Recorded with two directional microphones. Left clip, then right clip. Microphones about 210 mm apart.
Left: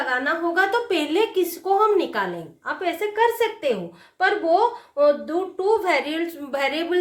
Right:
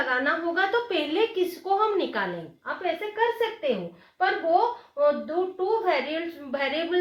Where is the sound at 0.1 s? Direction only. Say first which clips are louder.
Left 3 dB; 30° left (ahead or behind).